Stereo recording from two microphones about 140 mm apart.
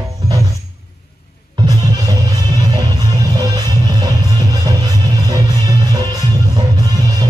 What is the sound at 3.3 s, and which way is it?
Music, 30° right (ahead or behind).